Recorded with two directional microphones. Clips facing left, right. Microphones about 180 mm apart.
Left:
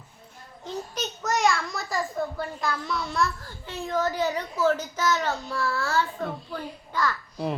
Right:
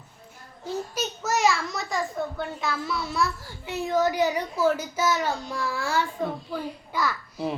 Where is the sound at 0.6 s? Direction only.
5° right (ahead or behind).